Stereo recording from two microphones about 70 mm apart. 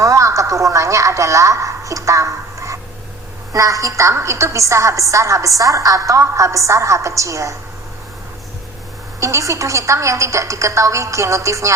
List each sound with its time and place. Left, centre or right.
0.0 s a woman's voice: right
9.2 s a woman's voice: right